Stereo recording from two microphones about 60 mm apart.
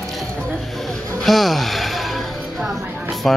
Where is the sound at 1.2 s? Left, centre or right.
Centre.